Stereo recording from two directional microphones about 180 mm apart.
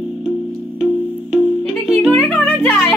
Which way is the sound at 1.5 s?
5° left (ahead or behind).